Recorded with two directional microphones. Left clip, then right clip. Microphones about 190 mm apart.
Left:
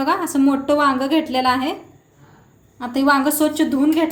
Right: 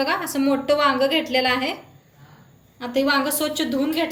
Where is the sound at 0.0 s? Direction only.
45° left (ahead or behind).